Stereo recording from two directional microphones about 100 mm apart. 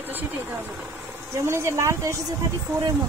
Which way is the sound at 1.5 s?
30° right (ahead or behind).